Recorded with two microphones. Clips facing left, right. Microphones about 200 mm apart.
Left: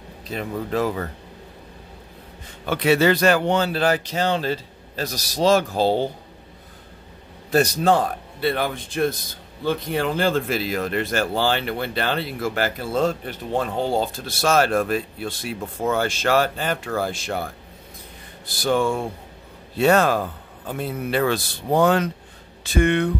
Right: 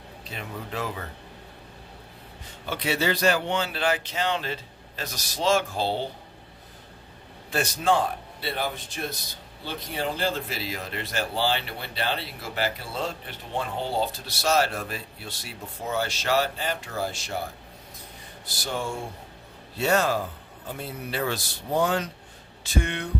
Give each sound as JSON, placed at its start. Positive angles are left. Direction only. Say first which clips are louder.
{"t": 0.3, "sound": "speech", "louder": "left 10 dB", "side_deg": 40}
{"t": 2.7, "sound": "speech", "louder": "left 9 dB", "side_deg": 55}
{"t": 7.5, "sound": "speech", "louder": "left 6 dB", "side_deg": 40}
{"t": 8.4, "sound": "a man's voice", "louder": "left 9 dB", "side_deg": 55}
{"t": 18.4, "sound": "a man's voice", "louder": "left 11 dB", "side_deg": 55}
{"t": 19.8, "sound": "a man's voice", "louder": "left 6 dB", "side_deg": 60}